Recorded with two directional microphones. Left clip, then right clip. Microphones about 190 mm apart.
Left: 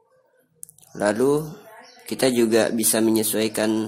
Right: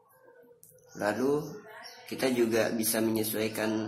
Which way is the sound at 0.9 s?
60° left (ahead or behind).